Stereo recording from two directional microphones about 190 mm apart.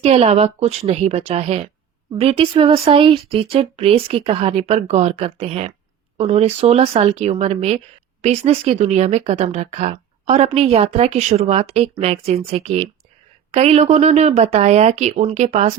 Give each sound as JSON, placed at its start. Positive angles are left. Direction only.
{"t": 0.0, "sound": "speech", "side_deg": -30}